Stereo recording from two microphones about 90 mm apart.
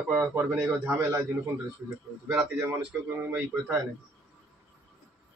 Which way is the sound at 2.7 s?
25° right (ahead or behind).